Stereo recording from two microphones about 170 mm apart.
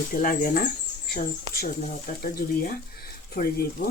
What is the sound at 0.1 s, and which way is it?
Speech, 55° left (ahead or behind).